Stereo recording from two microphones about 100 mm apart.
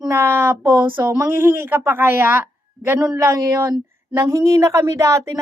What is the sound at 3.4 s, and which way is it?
Speech, 30° right (ahead or behind).